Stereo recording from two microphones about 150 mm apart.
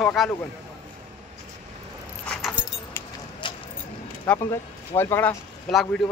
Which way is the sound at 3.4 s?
30° left (ahead or behind).